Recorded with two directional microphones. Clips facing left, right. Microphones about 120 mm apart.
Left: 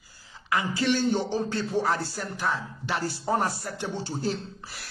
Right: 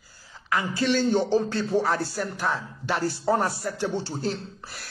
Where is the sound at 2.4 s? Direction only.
45° right (ahead or behind).